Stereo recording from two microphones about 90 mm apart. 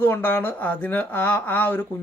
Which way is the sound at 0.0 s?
25° left (ahead or behind).